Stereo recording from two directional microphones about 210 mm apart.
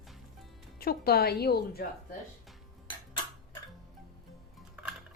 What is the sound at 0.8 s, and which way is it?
A woman's voice, 45° left (ahead or behind).